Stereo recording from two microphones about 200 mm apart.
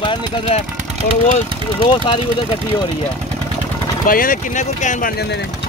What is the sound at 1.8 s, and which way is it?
Speech, 25° left (ahead or behind).